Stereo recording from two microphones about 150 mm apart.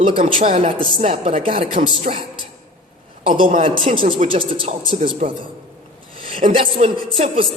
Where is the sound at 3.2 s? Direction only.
35° right (ahead or behind).